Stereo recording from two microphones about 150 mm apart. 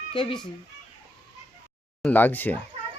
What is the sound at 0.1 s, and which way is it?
Speech, 35° left (ahead or behind).